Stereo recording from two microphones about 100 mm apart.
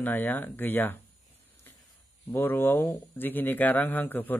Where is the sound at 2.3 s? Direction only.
20° left (ahead or behind).